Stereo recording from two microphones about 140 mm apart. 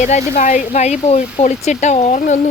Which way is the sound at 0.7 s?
55° left (ahead or behind).